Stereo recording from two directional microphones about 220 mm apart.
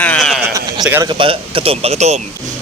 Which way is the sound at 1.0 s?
20° right (ahead or behind).